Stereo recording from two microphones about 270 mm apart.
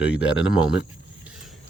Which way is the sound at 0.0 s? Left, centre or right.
Centre.